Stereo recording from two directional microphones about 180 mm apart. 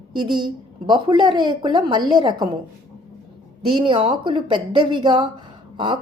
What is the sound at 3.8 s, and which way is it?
A woman's voice, 25° right (ahead or behind).